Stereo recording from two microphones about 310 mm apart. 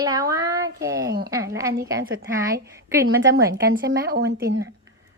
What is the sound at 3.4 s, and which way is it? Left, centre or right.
Speech, right.